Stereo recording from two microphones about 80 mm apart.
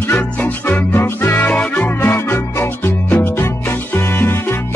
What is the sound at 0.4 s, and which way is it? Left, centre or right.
Music, left.